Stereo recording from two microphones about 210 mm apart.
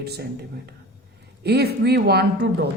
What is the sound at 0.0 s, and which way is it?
Speech, 50° right (ahead or behind).